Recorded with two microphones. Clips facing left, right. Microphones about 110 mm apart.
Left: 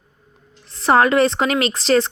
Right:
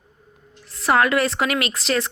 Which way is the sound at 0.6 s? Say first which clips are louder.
Left 4 dB; 30° left (ahead or behind).